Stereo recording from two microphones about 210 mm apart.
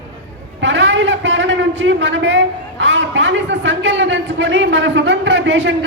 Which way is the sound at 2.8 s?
60° right (ahead or behind).